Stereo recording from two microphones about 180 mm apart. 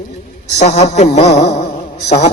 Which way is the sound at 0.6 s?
40° left (ahead or behind).